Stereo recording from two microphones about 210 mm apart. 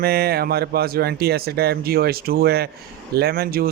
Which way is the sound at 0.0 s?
50° right (ahead or behind).